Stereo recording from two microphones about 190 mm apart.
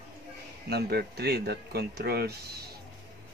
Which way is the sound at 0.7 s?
60° right (ahead or behind).